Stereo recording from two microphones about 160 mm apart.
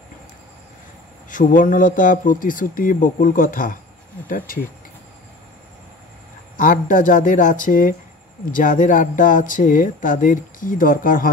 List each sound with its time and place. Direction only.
1.3 s speech: 55° left (ahead or behind)
6.5 s speech: 55° left (ahead or behind)